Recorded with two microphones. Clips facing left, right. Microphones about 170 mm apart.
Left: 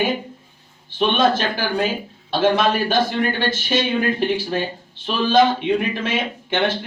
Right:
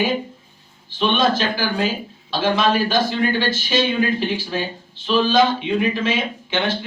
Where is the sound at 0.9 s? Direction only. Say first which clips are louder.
Left 1 dB; 55° left (ahead or behind).